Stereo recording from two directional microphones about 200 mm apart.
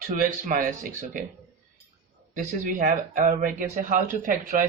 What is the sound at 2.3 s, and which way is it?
Speech, 40° right (ahead or behind).